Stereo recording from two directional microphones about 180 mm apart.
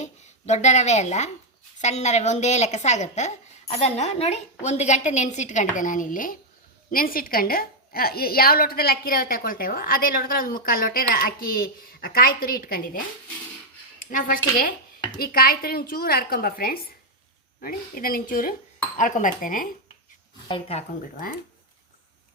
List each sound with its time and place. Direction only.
0.0 s a woman's voice: 40° left (ahead or behind)
14.0 s a woman's voice: 50° left (ahead or behind)
20.5 s a woman's voice: 35° left (ahead or behind)